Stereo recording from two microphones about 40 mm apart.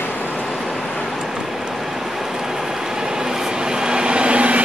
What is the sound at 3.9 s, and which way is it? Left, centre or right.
Vehicle, right.